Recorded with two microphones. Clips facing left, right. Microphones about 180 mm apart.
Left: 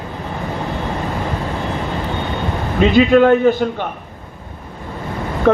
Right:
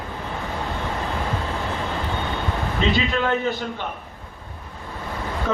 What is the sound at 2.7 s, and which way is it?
A man's voice, 55° left (ahead or behind).